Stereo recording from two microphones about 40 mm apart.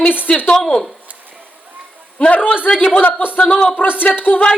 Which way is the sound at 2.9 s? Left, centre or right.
Left.